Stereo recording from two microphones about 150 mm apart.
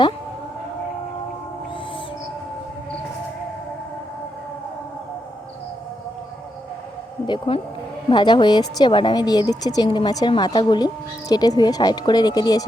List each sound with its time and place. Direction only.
7.3 s speech: 35° left (ahead or behind)